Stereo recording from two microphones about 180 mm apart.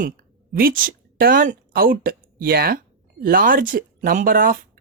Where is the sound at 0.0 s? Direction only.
55° right (ahead or behind).